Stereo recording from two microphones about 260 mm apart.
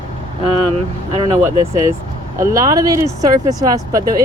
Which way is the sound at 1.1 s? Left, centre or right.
Right.